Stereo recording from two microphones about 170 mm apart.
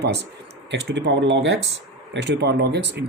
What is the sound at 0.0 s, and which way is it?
Speech, 80° right.